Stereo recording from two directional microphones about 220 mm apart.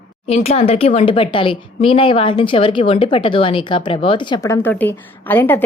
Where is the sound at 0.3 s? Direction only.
30° left (ahead or behind).